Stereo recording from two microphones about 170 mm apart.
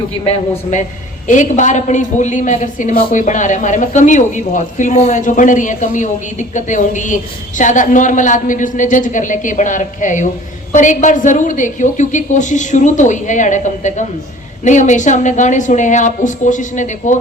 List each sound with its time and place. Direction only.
0.3 s a man's voice: 40° left (ahead or behind)